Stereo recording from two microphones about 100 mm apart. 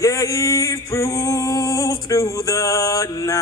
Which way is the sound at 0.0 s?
35° left (ahead or behind).